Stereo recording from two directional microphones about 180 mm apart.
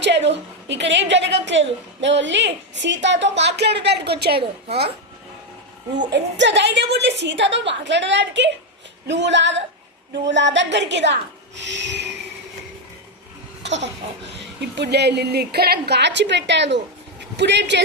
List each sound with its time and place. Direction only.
0.0 s a woman's voice: 75° right (ahead or behind)
6.1 s a woman's voice: 75° right (ahead or behind)
13.6 s laughter: 80° right
14.8 s a woman's voice: 65° right (ahead or behind)